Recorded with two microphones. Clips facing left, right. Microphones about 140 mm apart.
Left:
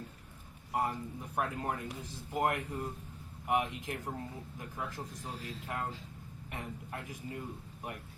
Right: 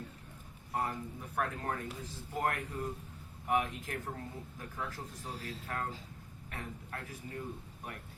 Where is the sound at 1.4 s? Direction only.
15° left (ahead or behind).